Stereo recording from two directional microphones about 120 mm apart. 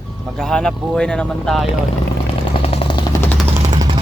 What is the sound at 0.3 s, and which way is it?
Speech, 5° left (ahead or behind).